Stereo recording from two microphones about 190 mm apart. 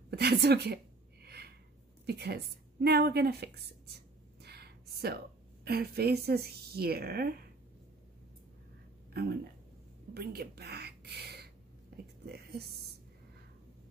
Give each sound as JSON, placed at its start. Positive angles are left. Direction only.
{"t": 0.1, "sound": "a woman's voice", "side_deg": -60}
{"t": 1.2, "sound": "a sound", "side_deg": -60}
{"t": 2.0, "sound": "a woman's voice", "side_deg": -60}
{"t": 3.9, "sound": "a sound", "side_deg": -60}
{"t": 5.7, "sound": "a woman's voice", "side_deg": -55}
{"t": 9.1, "sound": "a woman's voice", "side_deg": -55}